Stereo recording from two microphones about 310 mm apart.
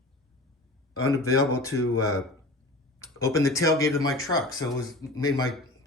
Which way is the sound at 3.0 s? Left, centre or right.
Centre.